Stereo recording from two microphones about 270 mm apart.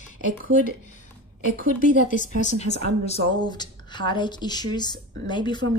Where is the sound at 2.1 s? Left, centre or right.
Left.